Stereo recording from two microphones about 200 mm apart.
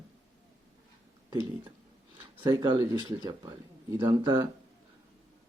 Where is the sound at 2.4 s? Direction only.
20° right (ahead or behind).